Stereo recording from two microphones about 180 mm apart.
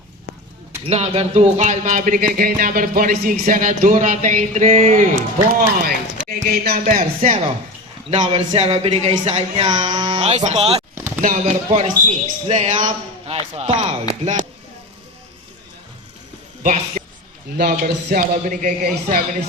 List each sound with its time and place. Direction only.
0.9 s speech: 35° right (ahead or behind)
5.5 s speech: 55° right (ahead or behind)
6.8 s speech: 45° right (ahead or behind)
12.7 s a man's voice: 30° right (ahead or behind)
16.6 s speech: 40° right (ahead or behind)
17.6 s speech: 55° right (ahead or behind)